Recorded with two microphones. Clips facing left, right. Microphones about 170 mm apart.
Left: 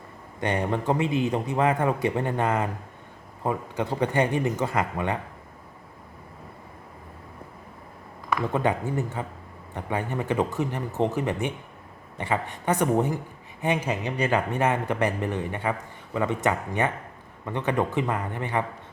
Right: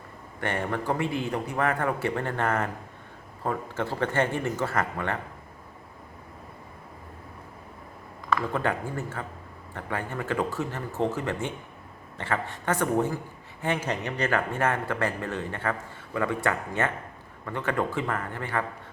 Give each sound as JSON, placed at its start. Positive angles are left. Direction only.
{"t": 0.3, "sound": "a man's voice", "side_deg": 15}
{"t": 8.3, "sound": "a man's voice", "side_deg": 15}